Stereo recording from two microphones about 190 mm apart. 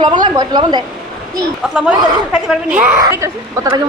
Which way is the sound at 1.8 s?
5° right (ahead or behind).